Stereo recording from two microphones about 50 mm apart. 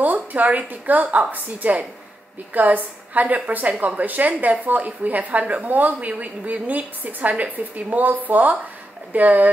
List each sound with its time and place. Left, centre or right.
0.0 s a woman's voice: right